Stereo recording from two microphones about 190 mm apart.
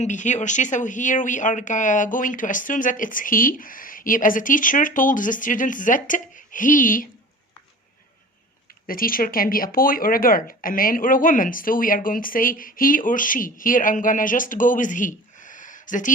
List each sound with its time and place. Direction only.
0.0 s speech: 40° left (ahead or behind)
8.9 s speech: 50° left (ahead or behind)